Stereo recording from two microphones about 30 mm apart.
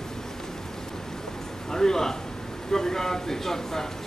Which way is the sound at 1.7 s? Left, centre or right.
Centre.